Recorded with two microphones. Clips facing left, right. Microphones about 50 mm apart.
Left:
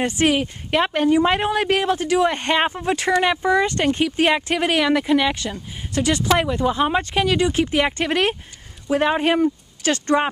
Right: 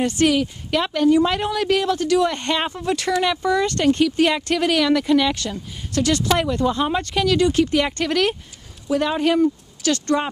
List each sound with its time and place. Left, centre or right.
0.0 s speech: left